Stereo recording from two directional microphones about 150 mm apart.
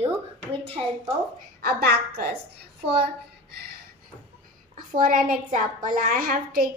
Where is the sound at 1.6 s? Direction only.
90° right.